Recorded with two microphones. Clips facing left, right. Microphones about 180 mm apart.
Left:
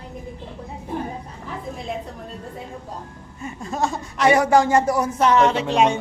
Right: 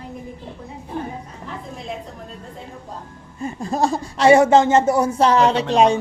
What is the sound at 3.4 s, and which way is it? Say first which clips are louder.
Speech: right 4 dB; 35° right (ahead or behind).